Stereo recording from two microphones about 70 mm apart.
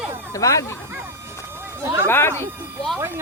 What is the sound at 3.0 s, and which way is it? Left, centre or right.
Speech, right.